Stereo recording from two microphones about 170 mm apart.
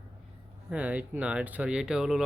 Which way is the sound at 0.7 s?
10° right (ahead or behind).